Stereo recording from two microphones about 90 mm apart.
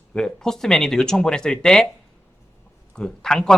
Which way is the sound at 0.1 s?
5° left (ahead or behind).